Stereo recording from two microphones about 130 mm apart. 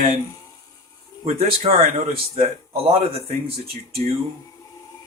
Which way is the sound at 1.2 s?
50° right (ahead or behind).